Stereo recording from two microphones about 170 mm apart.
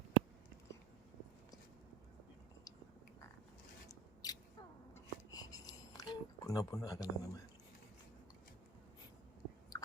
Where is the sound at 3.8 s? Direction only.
20° left (ahead or behind).